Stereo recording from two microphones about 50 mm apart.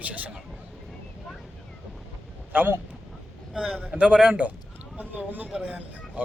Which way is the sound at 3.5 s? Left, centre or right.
Centre.